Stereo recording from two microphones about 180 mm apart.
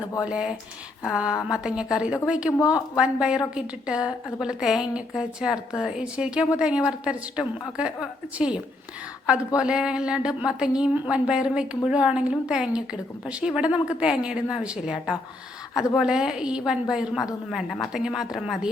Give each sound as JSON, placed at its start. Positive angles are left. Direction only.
{"t": 0.3, "sound": "a woman's voice", "side_deg": -5}
{"t": 2.5, "sound": "speech", "side_deg": 20}
{"t": 2.9, "sound": "a woman's voice", "side_deg": -5}